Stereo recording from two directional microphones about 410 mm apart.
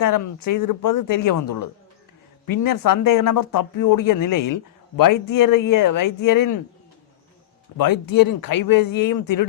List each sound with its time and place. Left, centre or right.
0.0 s speech: left
7.8 s speech: left